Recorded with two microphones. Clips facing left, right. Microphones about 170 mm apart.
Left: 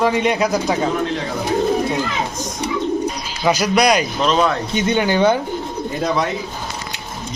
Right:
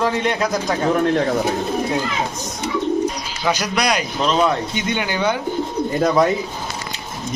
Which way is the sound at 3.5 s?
10° left (ahead or behind).